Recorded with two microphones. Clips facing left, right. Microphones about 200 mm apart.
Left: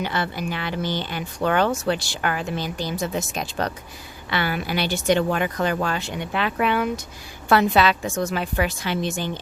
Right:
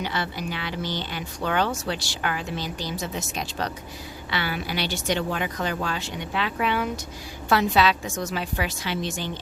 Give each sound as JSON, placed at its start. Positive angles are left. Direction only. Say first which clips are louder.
{"t": 0.0, "sound": "speech", "louder": "left 3 dB", "side_deg": 50}